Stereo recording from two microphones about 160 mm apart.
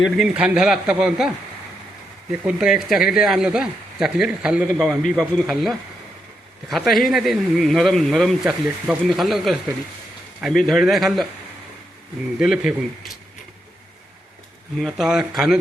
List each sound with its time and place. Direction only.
0.2 s speech: 5° right (ahead or behind)
2.6 s speech: 5° right (ahead or behind)
12.4 s speech: 5° right (ahead or behind)
14.8 s speech: centre (ahead or behind)